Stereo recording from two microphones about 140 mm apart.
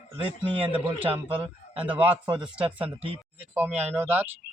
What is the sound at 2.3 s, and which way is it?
Speech, 35° right (ahead or behind).